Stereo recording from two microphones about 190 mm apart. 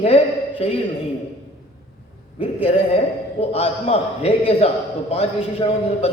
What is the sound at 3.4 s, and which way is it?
A man's voice, 30° left (ahead or behind).